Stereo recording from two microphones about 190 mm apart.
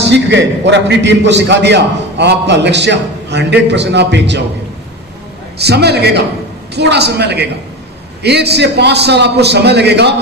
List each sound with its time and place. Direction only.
0.0 s a man's voice: 65° right (ahead or behind)
5.6 s a man's voice: 60° right (ahead or behind)